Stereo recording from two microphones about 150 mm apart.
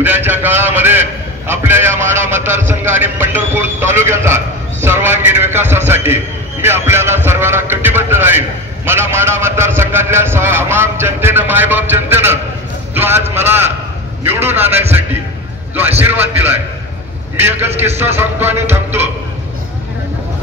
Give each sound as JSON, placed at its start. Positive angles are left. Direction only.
{"t": 0.0, "sound": "a man's voice", "side_deg": -15}
{"t": 16.0, "sound": "a man's voice", "side_deg": -15}